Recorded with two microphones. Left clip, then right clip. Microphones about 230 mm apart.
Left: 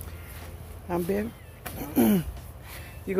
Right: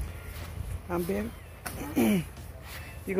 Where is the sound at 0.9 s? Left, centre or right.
Centre.